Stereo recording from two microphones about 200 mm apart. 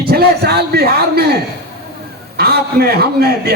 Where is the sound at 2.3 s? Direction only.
50° right (ahead or behind).